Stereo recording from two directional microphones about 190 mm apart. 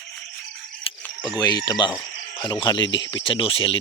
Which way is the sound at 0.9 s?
30° left (ahead or behind).